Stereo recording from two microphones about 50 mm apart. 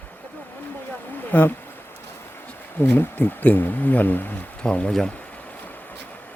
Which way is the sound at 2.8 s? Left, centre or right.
Left.